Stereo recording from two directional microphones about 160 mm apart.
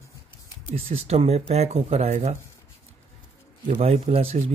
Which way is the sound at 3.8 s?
40° right (ahead or behind).